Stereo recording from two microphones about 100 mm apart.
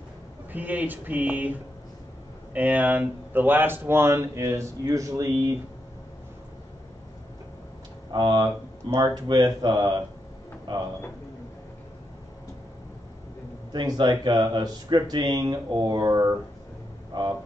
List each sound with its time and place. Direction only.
0.5 s speech: 15° right (ahead or behind); by 5.6 s 35° right (ahead or behind)
8.1 s speech: 45° right (ahead or behind)
13.7 s speech: 45° right (ahead or behind)
17.1 s speech: 50° right (ahead or behind)